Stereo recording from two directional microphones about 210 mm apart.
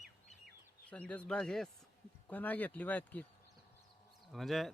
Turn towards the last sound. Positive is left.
turn(degrees=0)  # may be behind; listen again after turning